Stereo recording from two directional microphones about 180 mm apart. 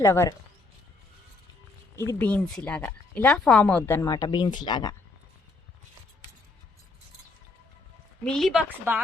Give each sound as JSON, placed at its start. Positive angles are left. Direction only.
{"t": 0.0, "sound": "speech", "side_deg": 15}
{"t": 2.0, "sound": "speech", "side_deg": 15}
{"t": 8.2, "sound": "a woman's voice", "side_deg": 0}